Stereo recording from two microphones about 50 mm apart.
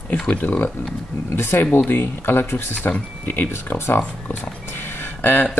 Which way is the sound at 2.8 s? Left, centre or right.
Left.